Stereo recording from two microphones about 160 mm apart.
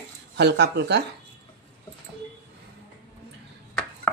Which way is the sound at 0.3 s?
90° right.